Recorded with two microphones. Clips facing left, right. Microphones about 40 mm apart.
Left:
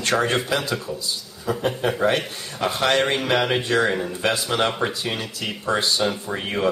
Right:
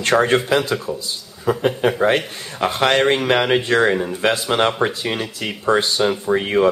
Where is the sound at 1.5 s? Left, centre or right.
Right.